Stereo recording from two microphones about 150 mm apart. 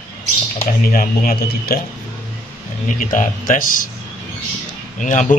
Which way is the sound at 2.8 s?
60° left (ahead or behind).